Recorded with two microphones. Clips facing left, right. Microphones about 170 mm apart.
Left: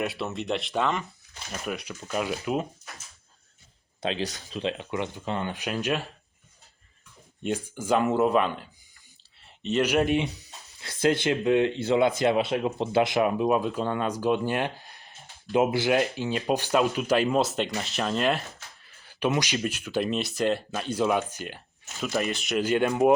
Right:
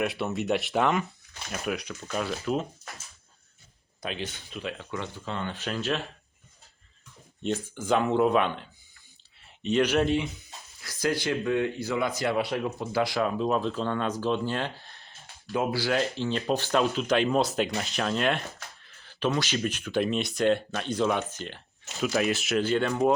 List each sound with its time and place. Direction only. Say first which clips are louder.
0.0 s speech: right 2 dB; centre (ahead or behind)
1.6 s speech: right 2 dB; centre (ahead or behind)
4.0 s speech: left 5 dB; 35° left (ahead or behind)
4.6 s speech: left 5 dB; 15° left (ahead or behind)
7.4 s speech: even; 10° left (ahead or behind)
9.6 s speech: even; 5° left (ahead or behind)
10.8 s speech: left 4 dB; 25° left (ahead or behind); by 18.4 s centre (ahead or behind)
19.0 s speech: left 2 dB; 15° left (ahead or behind)
22.0 s speech: right 2 dB; centre (ahead or behind)
22.6 s speech: left 4 dB; 15° left (ahead or behind)